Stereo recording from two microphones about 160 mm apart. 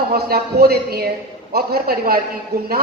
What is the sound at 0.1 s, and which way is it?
A woman's voice, 70° right (ahead or behind).